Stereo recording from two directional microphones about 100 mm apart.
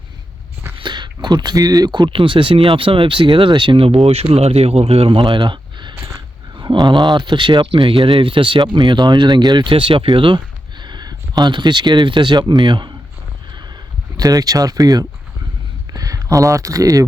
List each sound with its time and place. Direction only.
0.8 s speech: 50° right (ahead or behind)
14.2 s speech: 40° right (ahead or behind)